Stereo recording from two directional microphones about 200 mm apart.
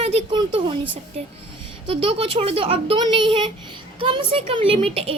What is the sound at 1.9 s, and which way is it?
Speech, 30° right (ahead or behind).